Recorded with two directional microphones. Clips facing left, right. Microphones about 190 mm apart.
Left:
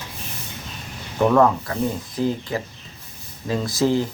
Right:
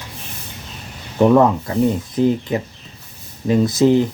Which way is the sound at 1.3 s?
20° right (ahead or behind).